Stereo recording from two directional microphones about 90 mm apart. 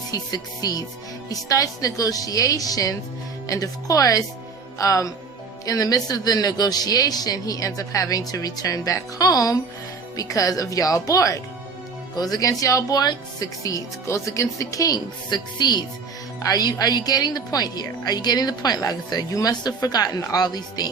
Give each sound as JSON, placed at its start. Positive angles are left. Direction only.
{"t": 0.1, "sound": "a woman's voice", "side_deg": 45}